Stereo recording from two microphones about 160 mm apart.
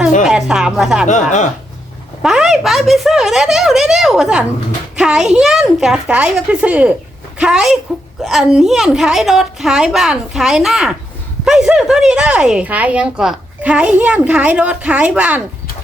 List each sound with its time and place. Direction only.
0.3 s a woman's voice: 5° right (ahead or behind)
1.0 s speech: 50° left (ahead or behind)
2.2 s a woman's voice: 5° right (ahead or behind)